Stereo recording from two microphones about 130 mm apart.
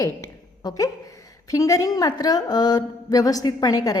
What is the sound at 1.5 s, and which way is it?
A woman's voice, 25° left (ahead or behind).